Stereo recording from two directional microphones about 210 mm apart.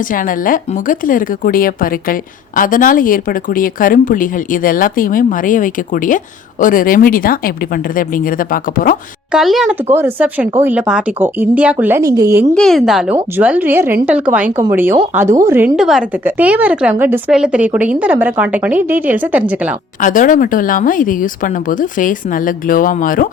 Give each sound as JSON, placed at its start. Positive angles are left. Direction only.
{"t": 0.0, "sound": "a woman's voice", "side_deg": 40}
{"t": 9.3, "sound": "a woman's voice", "side_deg": 0}
{"t": 12.5, "sound": "a woman's voice", "side_deg": 0}
{"t": 20.0, "sound": "a woman's voice", "side_deg": 40}